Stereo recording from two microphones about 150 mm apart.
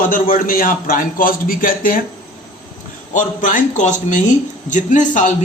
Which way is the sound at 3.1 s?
55° left (ahead or behind).